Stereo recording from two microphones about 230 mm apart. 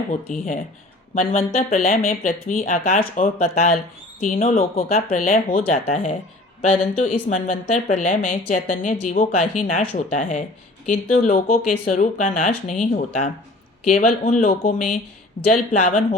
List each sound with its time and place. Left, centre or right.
0.1 s speech: left